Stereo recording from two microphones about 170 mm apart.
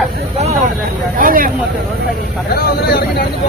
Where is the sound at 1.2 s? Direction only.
55° right (ahead or behind).